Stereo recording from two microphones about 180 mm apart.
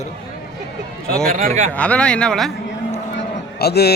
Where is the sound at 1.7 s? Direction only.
5° left (ahead or behind).